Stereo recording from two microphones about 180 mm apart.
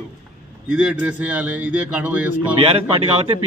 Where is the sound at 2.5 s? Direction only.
30° right (ahead or behind).